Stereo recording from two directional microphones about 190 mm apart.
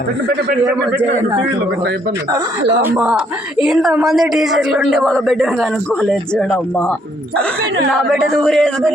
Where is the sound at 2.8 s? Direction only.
10° right (ahead or behind).